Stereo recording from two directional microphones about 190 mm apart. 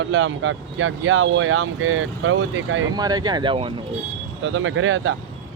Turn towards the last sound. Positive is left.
turn(degrees=-90)